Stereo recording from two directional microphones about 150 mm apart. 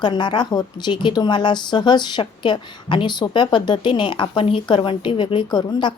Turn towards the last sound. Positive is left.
turn(degrees=30)  # may be behind; listen again after turning